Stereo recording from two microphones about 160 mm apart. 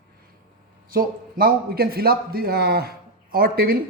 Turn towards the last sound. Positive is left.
turn(degrees=-70)  # may be behind; listen again after turning